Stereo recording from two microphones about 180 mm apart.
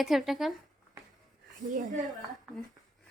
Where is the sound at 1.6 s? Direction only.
45° right (ahead or behind).